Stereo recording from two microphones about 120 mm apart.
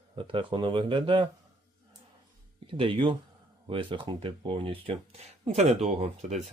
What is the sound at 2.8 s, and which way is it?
Speech, 45° right (ahead or behind).